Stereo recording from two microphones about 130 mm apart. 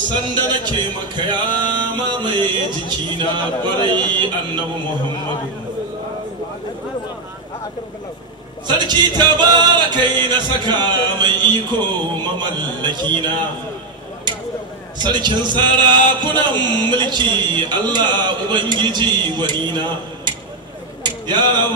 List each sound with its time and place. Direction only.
0.1 s music: 35° right (ahead or behind)
8.6 s music: 35° right (ahead or behind)
15.0 s music: 35° right (ahead or behind)
21.0 s a sound: 35° right (ahead or behind)